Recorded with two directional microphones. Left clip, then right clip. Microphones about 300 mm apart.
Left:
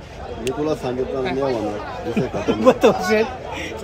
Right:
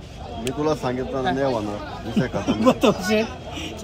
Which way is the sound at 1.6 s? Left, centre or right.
Centre.